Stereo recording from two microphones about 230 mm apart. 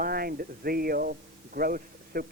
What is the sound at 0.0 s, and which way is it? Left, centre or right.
Speech, right.